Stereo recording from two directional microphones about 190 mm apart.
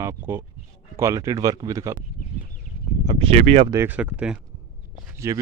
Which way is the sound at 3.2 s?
35° right (ahead or behind).